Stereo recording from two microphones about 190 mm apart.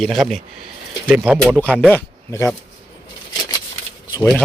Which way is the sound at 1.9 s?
10° left (ahead or behind).